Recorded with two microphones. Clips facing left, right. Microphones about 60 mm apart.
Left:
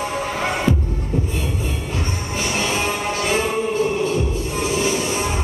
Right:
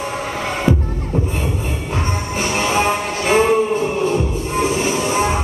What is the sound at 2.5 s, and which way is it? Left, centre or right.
Music, right.